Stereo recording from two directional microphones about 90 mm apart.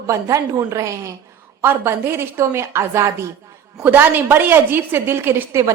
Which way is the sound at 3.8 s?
20° right (ahead or behind).